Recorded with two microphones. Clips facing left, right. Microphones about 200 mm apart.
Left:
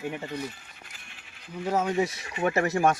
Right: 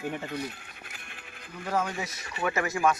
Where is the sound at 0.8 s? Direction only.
55° right (ahead or behind).